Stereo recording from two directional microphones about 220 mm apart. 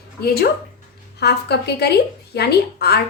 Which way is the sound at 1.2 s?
50° left (ahead or behind).